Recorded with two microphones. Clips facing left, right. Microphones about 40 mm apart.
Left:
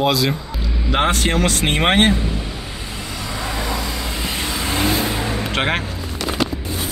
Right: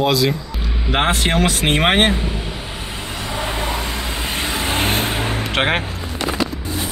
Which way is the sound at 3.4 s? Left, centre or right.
Right.